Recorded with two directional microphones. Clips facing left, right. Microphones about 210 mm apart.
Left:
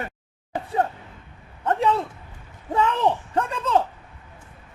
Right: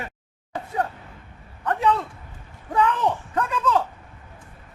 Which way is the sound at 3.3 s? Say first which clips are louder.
Left 1 dB; 25° left (ahead or behind).